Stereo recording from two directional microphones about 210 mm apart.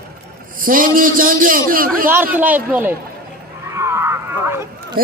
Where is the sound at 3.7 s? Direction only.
15° right (ahead or behind).